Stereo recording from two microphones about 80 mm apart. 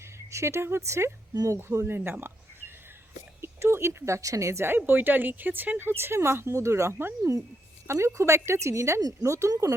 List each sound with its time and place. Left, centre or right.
0.3 s speech: right